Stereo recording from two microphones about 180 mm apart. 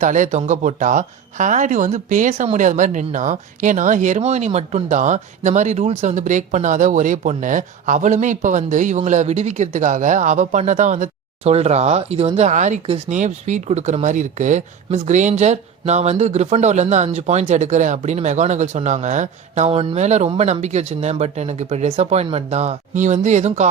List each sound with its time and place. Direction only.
0.0 s speech: 45° right (ahead or behind)